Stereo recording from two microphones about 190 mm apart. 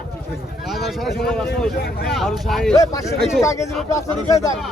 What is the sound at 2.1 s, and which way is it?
Speech, centre (ahead or behind).